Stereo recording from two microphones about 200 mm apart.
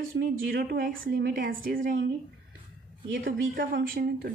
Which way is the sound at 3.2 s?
45° right (ahead or behind).